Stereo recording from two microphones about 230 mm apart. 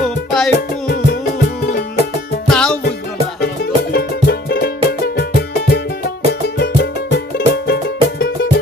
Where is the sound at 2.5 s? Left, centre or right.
Centre.